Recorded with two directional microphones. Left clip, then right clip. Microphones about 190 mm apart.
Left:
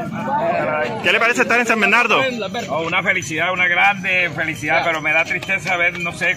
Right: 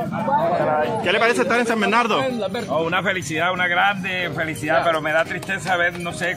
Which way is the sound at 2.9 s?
20° right (ahead or behind).